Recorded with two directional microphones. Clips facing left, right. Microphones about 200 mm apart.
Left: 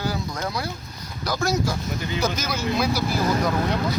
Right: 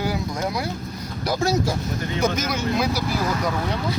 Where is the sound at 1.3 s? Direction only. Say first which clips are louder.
Right 2 dB; 25° right (ahead or behind).